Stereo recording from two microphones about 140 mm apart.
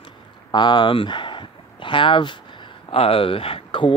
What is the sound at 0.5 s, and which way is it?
Speech, 35° left (ahead or behind).